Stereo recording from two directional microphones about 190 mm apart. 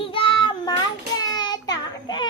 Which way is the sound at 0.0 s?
25° left (ahead or behind).